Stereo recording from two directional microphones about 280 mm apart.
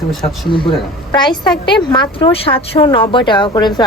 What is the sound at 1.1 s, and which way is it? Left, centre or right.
Speech, centre.